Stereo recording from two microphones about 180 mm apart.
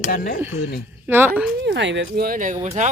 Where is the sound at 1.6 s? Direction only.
75° right (ahead or behind); by 2.7 s 45° right (ahead or behind).